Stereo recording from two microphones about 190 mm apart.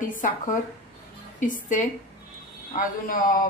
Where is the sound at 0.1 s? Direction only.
45° left (ahead or behind).